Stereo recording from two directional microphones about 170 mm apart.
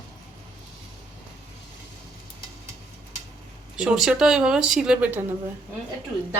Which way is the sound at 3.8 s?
5° right (ahead or behind).